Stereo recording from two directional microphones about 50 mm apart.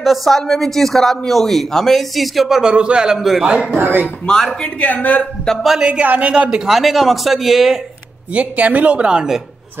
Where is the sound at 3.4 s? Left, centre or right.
Centre.